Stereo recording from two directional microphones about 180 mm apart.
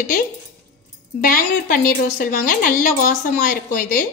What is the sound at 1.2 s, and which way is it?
A woman's voice, 50° left (ahead or behind).